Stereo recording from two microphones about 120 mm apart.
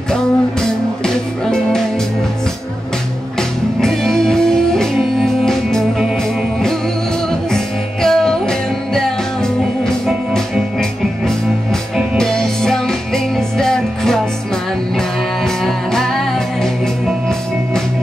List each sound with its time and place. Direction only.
0.1 s music: 5° left (ahead or behind)
3.3 s music: 5° left (ahead or behind)
7.5 s music: 5° left (ahead or behind)